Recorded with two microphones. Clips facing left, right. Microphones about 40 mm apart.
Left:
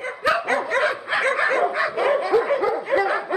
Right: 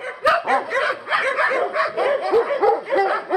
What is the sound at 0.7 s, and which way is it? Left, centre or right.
Dog, centre.